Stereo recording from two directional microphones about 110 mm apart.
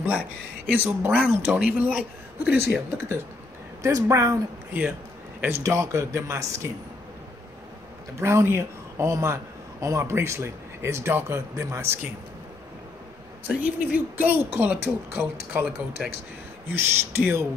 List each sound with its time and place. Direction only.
0.7 s a man's voice: 15° right (ahead or behind)
4.7 s a man's voice: 20° right (ahead or behind)
8.2 s a man's voice: 25° right (ahead or behind)
13.5 s speech: 15° right (ahead or behind)
16.7 s a man's voice: 20° right (ahead or behind)